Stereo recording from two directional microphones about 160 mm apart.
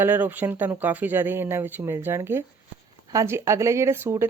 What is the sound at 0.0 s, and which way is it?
Speech, 10° right (ahead or behind).